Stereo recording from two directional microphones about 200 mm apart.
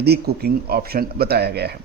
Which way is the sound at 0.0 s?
50° right (ahead or behind).